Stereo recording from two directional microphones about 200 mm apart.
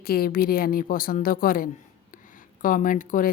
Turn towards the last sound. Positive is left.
turn(degrees=40)  # may be behind; listen again after turning